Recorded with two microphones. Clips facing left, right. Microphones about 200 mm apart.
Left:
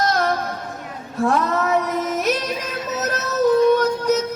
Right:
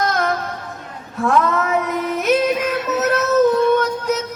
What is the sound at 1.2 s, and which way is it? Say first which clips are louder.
Child singing: right 2 dB; 35° left (ahead or behind).